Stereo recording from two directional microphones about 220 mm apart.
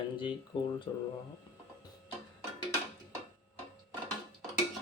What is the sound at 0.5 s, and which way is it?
Speech, 25° left (ahead or behind).